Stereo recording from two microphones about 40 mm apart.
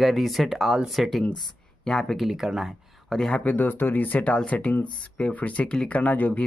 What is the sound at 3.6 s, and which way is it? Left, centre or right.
Speech, left.